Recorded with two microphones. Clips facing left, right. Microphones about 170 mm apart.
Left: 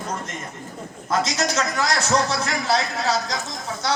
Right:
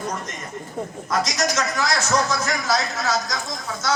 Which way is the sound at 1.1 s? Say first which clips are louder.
Left 1 dB; 30° left (ahead or behind).